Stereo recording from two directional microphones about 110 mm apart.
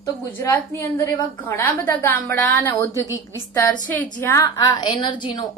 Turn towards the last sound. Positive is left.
turn(degrees=45)  # may be behind; listen again after turning